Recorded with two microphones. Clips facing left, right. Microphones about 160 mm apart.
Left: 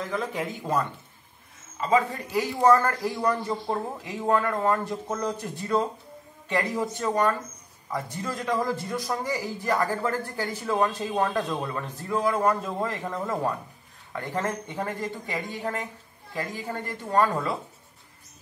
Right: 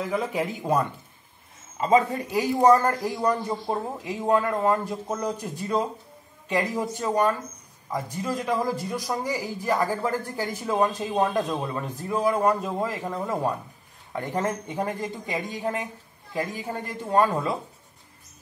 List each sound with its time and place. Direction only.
0.0 s speech: 10° right (ahead or behind)